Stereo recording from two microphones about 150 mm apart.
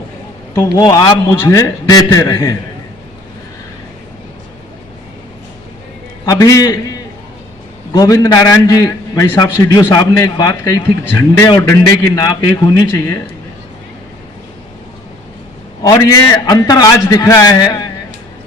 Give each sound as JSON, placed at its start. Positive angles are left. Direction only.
{"t": 0.5, "sound": "a man's voice", "side_deg": 20}
{"t": 6.2, "sound": "a man's voice", "side_deg": 25}
{"t": 7.9, "sound": "a man's voice", "side_deg": 25}
{"t": 15.8, "sound": "a man's voice", "side_deg": 25}